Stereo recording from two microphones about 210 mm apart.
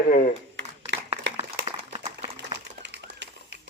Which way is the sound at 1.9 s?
30° right (ahead or behind).